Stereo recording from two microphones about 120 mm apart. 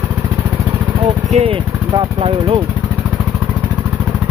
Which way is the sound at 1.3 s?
60° right (ahead or behind).